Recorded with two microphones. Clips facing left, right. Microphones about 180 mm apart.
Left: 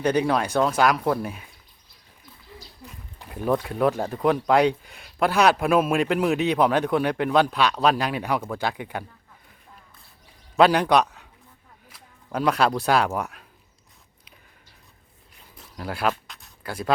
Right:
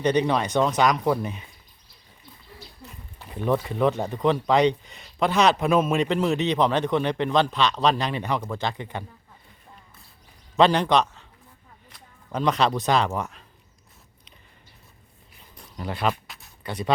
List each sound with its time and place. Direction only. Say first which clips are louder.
0.0 s speech: even; 5° left (ahead or behind)
3.2 s speech: even; 5° left (ahead or behind)
10.6 s speech: left 1 dB; 10° left (ahead or behind)
15.5 s a sound: even; 5° left (ahead or behind)